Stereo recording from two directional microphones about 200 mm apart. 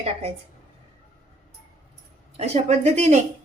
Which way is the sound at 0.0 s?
30° right (ahead or behind).